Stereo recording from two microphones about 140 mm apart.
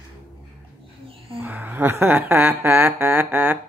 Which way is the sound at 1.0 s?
40° right (ahead or behind).